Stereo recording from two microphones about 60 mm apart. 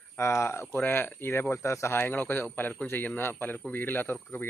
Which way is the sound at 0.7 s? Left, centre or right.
Left.